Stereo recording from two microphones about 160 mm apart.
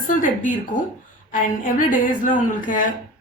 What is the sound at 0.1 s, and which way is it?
Speech, 55° left (ahead or behind).